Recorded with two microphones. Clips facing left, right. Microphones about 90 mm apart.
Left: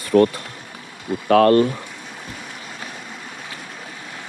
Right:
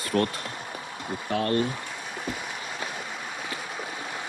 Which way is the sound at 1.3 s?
90° left.